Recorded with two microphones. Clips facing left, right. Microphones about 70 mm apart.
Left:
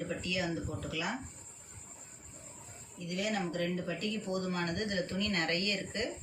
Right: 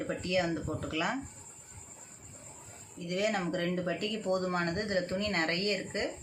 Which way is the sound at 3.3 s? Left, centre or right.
Right.